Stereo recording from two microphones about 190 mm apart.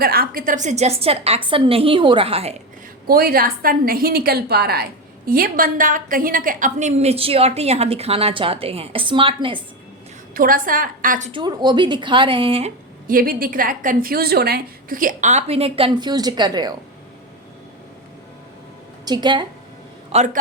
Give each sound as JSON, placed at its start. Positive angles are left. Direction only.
{"t": 0.0, "sound": "a woman's voice", "side_deg": -50}
{"t": 3.1, "sound": "a woman's voice", "side_deg": -50}
{"t": 10.3, "sound": "a woman's voice", "side_deg": -45}
{"t": 11.3, "sound": "a woman's voice", "side_deg": -25}
{"t": 13.1, "sound": "a woman's voice", "side_deg": -50}
{"t": 19.0, "sound": "a woman's voice", "side_deg": -20}
{"t": 20.1, "sound": "a woman's voice", "side_deg": -40}